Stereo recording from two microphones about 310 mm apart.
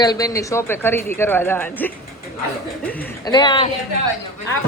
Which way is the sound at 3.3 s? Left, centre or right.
Centre.